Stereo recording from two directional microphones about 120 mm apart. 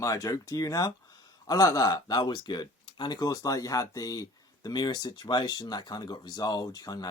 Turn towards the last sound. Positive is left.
turn(degrees=30)  # may be behind; listen again after turning